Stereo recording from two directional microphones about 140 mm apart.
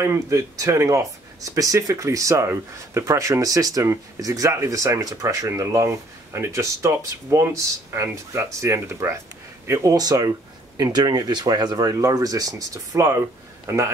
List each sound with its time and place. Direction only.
0.0 s speech: 20° right (ahead or behind)